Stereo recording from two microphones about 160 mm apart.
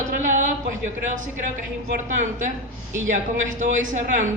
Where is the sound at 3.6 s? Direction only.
50° right (ahead or behind).